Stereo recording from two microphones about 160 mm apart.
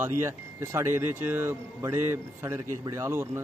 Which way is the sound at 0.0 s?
15° right (ahead or behind).